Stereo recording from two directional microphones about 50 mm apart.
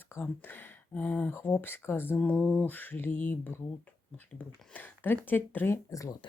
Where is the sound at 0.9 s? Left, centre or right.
Left.